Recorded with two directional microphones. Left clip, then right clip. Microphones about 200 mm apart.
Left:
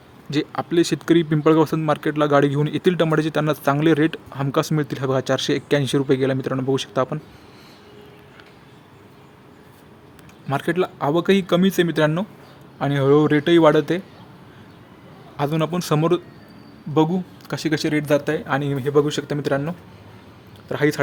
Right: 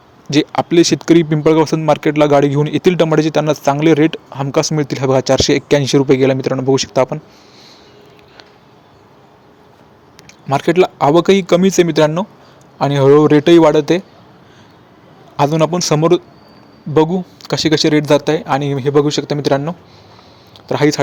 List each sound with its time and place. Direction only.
0.3 s speech: 15° right (ahead or behind)
10.5 s speech: 15° right (ahead or behind)
15.4 s speech: 15° right (ahead or behind)